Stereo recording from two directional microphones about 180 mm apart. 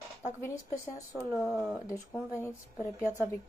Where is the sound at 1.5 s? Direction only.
Centre (ahead or behind).